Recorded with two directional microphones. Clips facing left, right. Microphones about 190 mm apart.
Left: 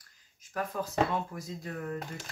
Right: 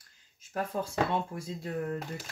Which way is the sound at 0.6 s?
30° right (ahead or behind).